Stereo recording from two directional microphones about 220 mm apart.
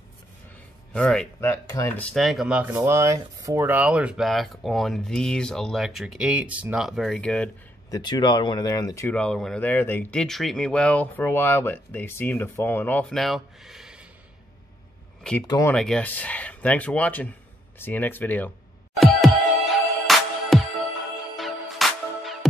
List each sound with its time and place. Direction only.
0.9 s speech: 5° left (ahead or behind)
7.9 s speech: 20° left (ahead or behind); by 14.0 s centre (ahead or behind)
15.4 s speech: 20° left (ahead or behind)
15.7 s speech: 5° left (ahead or behind)
18.9 s music: centre (ahead or behind)